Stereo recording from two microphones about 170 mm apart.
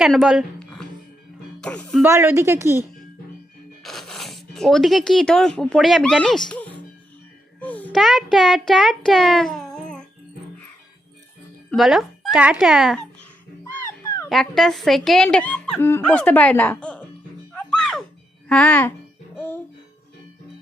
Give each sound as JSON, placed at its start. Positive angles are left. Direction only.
{"t": 0.0, "sound": "speech", "side_deg": 0}
{"t": 2.0, "sound": "a woman's voice", "side_deg": -15}
{"t": 3.8, "sound": "a child's voice", "side_deg": 0}
{"t": 11.7, "sound": "speech", "side_deg": 0}
{"t": 13.7, "sound": "music", "side_deg": 15}
{"t": 14.3, "sound": "speech", "side_deg": 0}
{"t": 17.5, "sound": "music", "side_deg": 5}
{"t": 18.4, "sound": "speech", "side_deg": 5}
{"t": 19.4, "sound": "music", "side_deg": 10}